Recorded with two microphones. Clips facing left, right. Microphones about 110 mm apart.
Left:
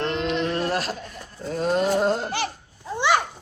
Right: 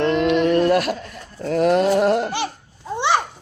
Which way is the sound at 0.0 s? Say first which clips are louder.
Right 7 dB; 60° right (ahead or behind).